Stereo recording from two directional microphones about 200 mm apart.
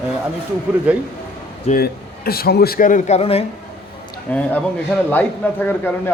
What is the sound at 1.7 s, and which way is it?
A man's voice, 50° left (ahead or behind).